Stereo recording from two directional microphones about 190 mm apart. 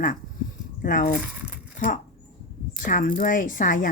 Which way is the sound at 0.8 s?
45° left (ahead or behind).